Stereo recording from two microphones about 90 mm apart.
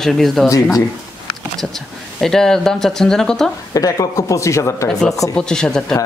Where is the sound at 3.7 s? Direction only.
40° left (ahead or behind).